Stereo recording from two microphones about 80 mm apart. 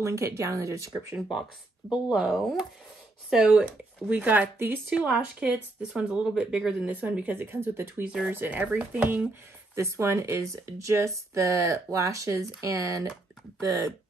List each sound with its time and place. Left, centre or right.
0.0 s speech: right
1.9 s speech: centre; by 4.7 s right
4.8 s speech: centre; by 7.9 s right
8.0 s speech: centre
8.3 s speech: right
9.8 s speech: right